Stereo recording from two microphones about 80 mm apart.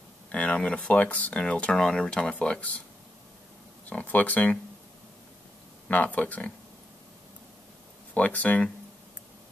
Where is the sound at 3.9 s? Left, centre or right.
Centre.